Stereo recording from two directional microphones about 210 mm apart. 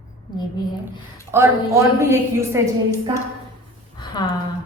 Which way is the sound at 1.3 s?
10° right (ahead or behind).